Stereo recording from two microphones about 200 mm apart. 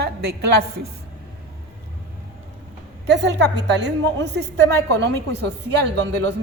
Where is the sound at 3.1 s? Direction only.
60° right (ahead or behind).